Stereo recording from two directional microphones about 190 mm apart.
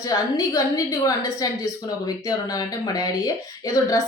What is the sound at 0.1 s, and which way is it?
Speech, 20° left (ahead or behind).